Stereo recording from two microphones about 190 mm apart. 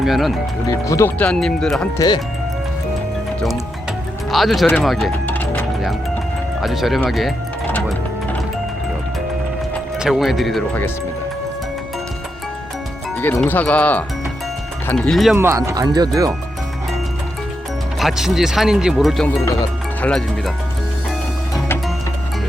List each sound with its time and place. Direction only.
0.0 s speech: centre (ahead or behind)
0.7 s speech: 15° left (ahead or behind)
2.0 s speech: 20° left (ahead or behind)
4.3 s speech: centre (ahead or behind)
5.2 s music: 10° left (ahead or behind)
6.6 s speech: centre (ahead or behind)
7.7 s music: 5° left (ahead or behind)
10.0 s speech: centre (ahead or behind)
13.1 s speech: 10° left (ahead or behind)
15.4 s speech: 15° right (ahead or behind)
18.0 s speech: centre (ahead or behind)